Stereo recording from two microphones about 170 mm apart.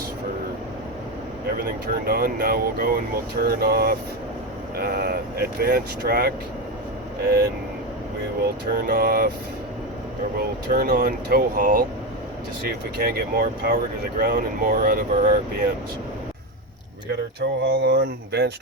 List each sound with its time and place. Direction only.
1.5 s speech: 60° right (ahead or behind)
8.9 s speech: 60° right (ahead or behind)
10.7 s speech: 55° right (ahead or behind)
17.4 s speech: 80° right